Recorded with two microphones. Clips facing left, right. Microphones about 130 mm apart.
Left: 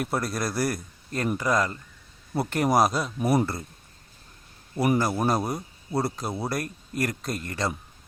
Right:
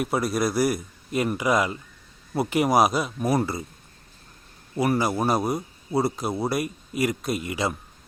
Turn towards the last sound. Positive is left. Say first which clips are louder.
# right 3 dB
turn(degrees=-5)  # may be behind; listen again after turning